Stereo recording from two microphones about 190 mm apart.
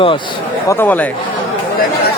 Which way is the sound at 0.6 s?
10° left (ahead or behind).